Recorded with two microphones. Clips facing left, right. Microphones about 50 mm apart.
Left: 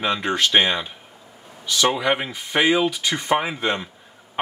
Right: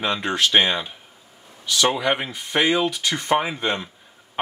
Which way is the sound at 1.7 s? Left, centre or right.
Centre.